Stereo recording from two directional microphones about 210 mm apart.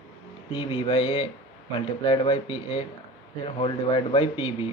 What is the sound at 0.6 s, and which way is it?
A man's voice, 30° left (ahead or behind).